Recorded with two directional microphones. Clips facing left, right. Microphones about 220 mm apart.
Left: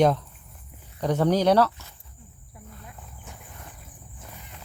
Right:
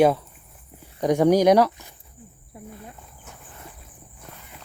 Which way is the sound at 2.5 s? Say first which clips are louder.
Right 7 dB; 25° right (ahead or behind).